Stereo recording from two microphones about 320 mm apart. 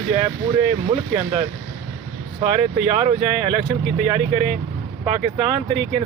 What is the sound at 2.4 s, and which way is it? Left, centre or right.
Speech, centre.